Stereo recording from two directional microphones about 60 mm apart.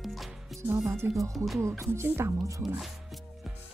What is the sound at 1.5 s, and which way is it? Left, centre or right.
Music, right.